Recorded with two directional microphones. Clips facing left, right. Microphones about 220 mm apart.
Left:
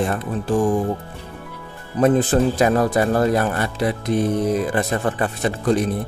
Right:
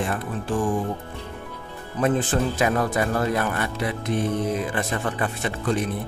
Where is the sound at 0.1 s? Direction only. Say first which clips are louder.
Left 5 dB; 40° left (ahead or behind).